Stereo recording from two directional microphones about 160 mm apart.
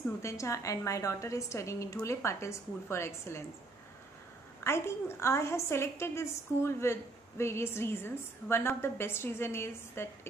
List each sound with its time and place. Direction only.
0.2 s a woman's voice: 20° left (ahead or behind)
4.6 s a woman's voice: 15° left (ahead or behind)